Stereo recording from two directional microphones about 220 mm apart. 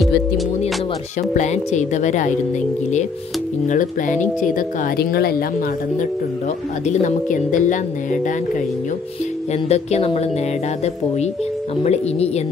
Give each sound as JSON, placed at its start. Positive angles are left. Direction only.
{"t": 1.3, "sound": "speech", "side_deg": 30}
{"t": 3.6, "sound": "speech", "side_deg": 35}
{"t": 6.9, "sound": "speech", "side_deg": 35}
{"t": 9.5, "sound": "speech", "side_deg": 30}
{"t": 11.8, "sound": "speech", "side_deg": 30}